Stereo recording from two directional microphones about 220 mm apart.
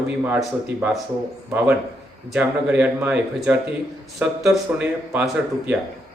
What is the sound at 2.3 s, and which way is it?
Speech, 5° right (ahead or behind).